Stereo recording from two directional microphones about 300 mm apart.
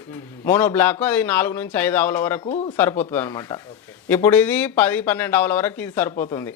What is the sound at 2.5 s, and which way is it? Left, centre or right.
Speech, left.